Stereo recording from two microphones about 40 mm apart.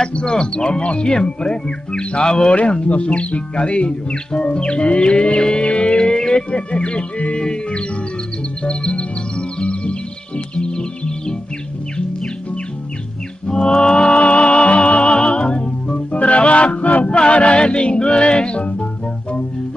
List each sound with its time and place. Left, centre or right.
0.0 s speech: left
5.7 s music: left
8.6 s speech: left
9.6 s music: left
13.5 s music: centre